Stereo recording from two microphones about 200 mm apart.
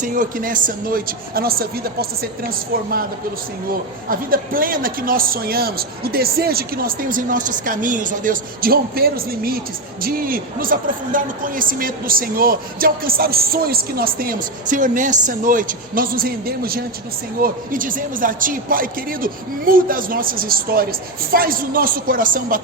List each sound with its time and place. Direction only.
0.0 s speech: 40° right (ahead or behind)
4.1 s speech: 45° right (ahead or behind)